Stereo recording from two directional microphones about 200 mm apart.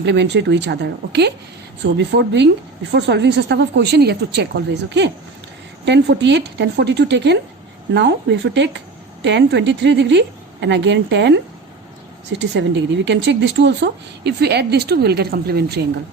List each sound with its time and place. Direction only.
0.0 s a woman's voice: 60° right (ahead or behind)